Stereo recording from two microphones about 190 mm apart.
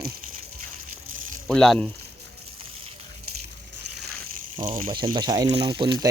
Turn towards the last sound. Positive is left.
turn(degrees=-20)  # may be behind; listen again after turning